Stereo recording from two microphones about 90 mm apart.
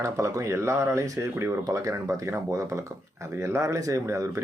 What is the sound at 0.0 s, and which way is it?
Speech, 35° right (ahead or behind).